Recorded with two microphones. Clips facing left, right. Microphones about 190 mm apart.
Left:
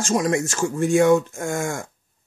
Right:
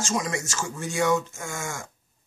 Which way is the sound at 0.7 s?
55° left (ahead or behind).